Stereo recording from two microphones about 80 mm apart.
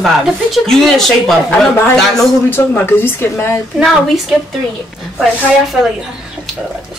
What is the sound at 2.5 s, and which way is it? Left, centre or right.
Speech, left.